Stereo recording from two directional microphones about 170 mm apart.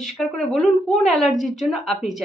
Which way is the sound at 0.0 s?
Centre (ahead or behind).